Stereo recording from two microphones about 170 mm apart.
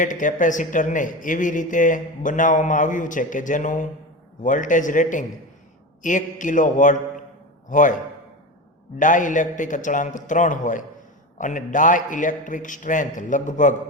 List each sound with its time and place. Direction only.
0.0 s speech: 50° left (ahead or behind)